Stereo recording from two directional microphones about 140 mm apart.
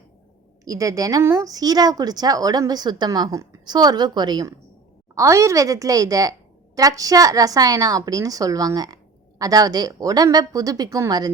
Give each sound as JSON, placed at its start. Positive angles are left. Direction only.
{"t": 0.6, "sound": "speech", "side_deg": -25}
{"t": 5.1, "sound": "speech", "side_deg": -20}